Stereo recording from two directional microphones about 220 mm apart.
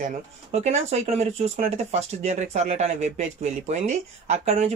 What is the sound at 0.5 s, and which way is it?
Speech, 30° right (ahead or behind).